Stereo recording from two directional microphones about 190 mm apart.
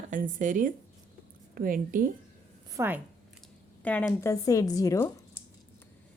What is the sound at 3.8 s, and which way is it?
A woman's voice, 10° left (ahead or behind).